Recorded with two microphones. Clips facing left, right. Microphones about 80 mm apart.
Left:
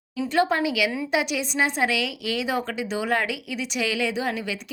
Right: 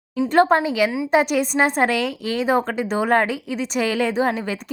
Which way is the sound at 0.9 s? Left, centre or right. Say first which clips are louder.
Right 4 dB; centre.